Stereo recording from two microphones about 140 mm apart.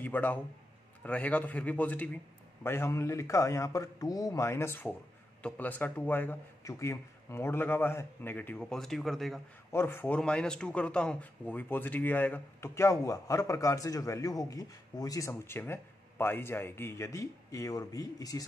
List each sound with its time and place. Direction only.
0.0 s a man's voice: 10° left (ahead or behind)
9.7 s speech: 15° left (ahead or behind)